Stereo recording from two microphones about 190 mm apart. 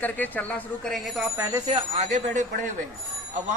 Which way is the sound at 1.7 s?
35° right (ahead or behind).